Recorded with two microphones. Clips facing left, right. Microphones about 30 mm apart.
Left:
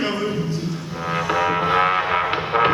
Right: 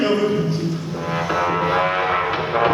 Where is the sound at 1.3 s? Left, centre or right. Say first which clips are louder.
Even; centre.